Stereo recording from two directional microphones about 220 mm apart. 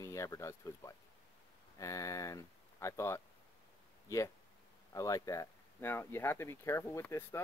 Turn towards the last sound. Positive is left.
turn(degrees=10)  # may be behind; listen again after turning